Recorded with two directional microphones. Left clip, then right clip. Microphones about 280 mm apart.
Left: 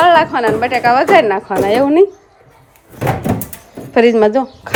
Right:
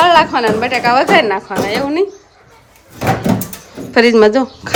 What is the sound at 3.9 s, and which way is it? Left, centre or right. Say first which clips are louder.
Speech: right 1 dB; centre.